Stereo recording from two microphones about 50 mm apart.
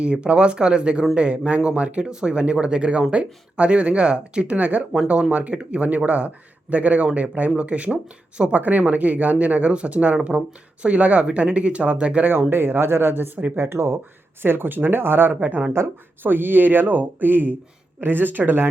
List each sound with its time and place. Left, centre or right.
0.0 s speech: right
12.5 s speech: right
13.6 s speech: right
14.4 s speech: right
15.3 s speech: right